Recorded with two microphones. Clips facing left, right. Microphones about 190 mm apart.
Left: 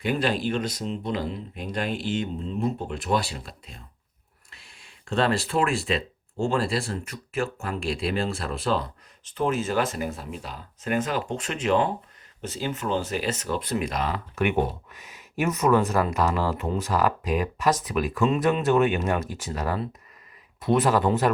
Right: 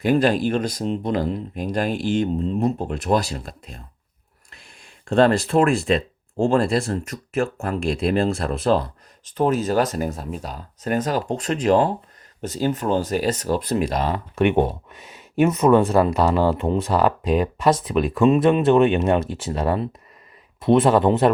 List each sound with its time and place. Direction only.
0.0 s speech: 45° right (ahead or behind); by 21.3 s 25° right (ahead or behind)